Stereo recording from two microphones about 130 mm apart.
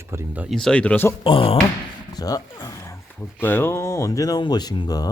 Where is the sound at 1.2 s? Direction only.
45° left (ahead or behind).